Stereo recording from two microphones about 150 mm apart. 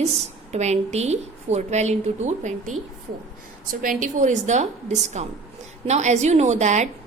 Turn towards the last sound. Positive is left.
turn(degrees=-50)  # may be behind; listen again after turning